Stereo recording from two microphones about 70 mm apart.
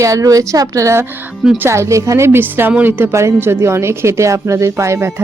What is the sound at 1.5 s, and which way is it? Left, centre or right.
Speech, right.